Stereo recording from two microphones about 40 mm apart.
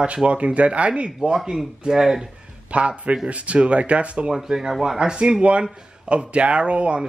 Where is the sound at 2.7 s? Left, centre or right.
Right.